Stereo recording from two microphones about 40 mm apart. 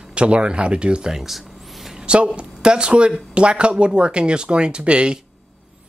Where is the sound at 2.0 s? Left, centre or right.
Right.